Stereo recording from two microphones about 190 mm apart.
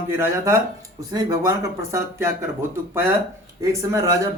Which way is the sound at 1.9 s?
15° right (ahead or behind).